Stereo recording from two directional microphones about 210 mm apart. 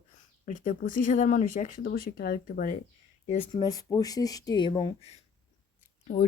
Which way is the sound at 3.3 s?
25° left (ahead or behind).